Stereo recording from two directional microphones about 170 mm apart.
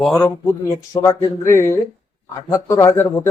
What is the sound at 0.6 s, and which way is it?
Speech, 20° left (ahead or behind).